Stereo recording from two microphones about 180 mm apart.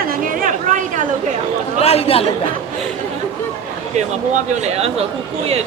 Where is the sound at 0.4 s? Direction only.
45° right (ahead or behind).